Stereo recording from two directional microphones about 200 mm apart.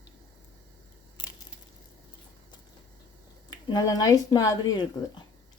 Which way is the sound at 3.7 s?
20° left (ahead or behind).